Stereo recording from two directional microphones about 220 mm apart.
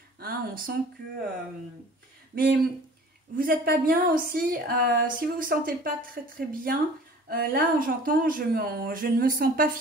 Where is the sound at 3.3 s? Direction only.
40° right (ahead or behind).